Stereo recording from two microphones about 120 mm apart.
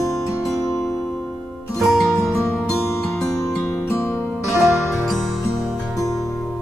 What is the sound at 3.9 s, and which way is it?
Music, 20° left (ahead or behind).